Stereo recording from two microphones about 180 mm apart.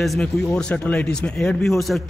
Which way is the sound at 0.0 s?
Centre (ahead or behind).